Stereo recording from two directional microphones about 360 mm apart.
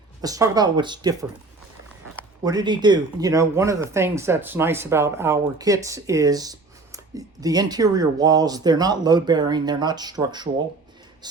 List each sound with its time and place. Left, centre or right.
0.2 s speech: centre
2.4 s speech: centre